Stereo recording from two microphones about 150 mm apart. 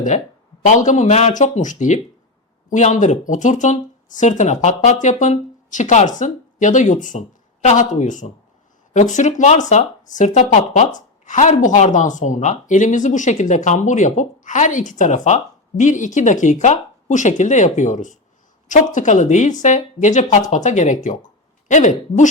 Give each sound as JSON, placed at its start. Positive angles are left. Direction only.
{"t": 0.7, "sound": "a woman's voice", "side_deg": 55}